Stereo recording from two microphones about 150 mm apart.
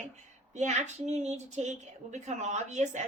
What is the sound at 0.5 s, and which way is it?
A woman's voice, 50° right (ahead or behind).